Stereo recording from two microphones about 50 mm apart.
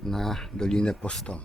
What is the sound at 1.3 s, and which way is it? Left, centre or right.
Speech, left.